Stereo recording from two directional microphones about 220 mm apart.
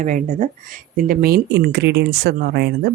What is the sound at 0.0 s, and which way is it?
Speech, 35° right (ahead or behind).